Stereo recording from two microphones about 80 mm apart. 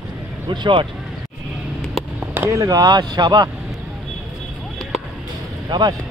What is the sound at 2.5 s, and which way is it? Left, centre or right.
Speech, right.